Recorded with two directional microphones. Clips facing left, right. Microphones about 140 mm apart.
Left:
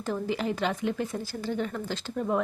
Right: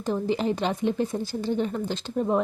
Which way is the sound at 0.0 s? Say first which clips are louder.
Right 4 dB; 25° right (ahead or behind).